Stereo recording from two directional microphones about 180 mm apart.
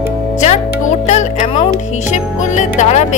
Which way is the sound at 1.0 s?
40° left (ahead or behind).